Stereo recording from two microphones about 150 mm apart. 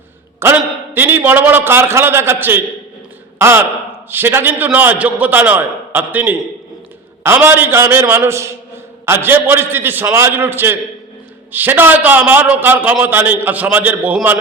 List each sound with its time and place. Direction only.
0.4 s a man's voice: 15° right (ahead or behind)